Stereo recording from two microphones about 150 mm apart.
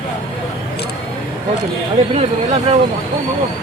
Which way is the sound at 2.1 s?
45° right (ahead or behind).